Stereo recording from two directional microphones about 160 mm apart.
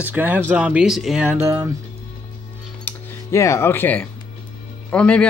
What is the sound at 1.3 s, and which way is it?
Speech, 15° right (ahead or behind).